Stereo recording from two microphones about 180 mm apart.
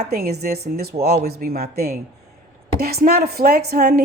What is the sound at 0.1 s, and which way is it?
Speech, 60° right (ahead or behind).